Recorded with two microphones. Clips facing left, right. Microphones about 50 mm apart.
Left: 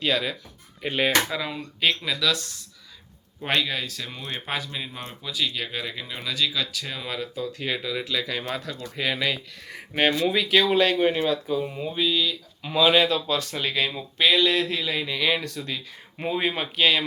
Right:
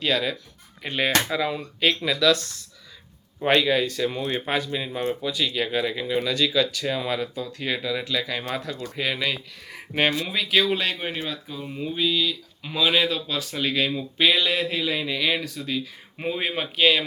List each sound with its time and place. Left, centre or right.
0.0 s speech: centre
4.9 s speech: centre
5.2 s speech: centre